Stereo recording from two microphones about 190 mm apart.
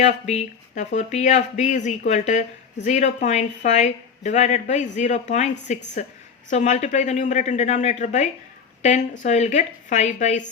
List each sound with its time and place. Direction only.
0.0 s a woman's voice: 35° left (ahead or behind)